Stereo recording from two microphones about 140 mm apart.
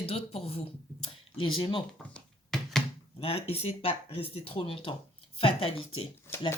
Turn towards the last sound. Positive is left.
turn(degrees=15)  # may be behind; listen again after turning